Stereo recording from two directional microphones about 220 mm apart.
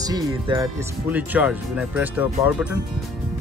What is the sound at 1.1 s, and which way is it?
Speech, 5° right (ahead or behind).